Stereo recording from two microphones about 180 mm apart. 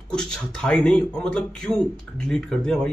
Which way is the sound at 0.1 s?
5° left (ahead or behind).